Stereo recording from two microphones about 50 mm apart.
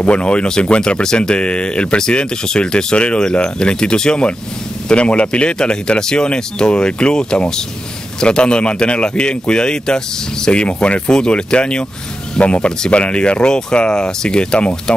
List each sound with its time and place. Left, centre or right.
0.0 s speech: left